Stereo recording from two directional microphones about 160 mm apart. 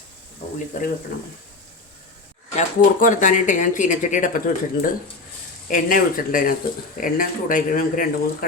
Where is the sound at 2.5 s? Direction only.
45° left (ahead or behind).